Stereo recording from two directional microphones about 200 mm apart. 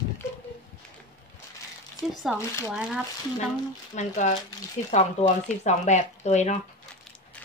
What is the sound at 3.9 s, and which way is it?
Speech, 35° left (ahead or behind).